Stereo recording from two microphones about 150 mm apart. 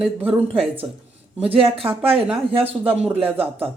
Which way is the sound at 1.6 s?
40° right (ahead or behind).